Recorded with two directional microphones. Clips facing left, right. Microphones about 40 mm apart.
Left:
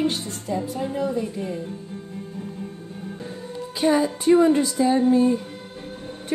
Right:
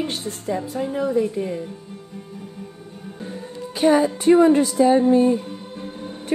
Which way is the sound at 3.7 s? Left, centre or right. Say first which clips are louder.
Right 3 dB; right.